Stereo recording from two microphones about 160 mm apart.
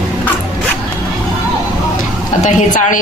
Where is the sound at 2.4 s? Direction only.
50° left (ahead or behind).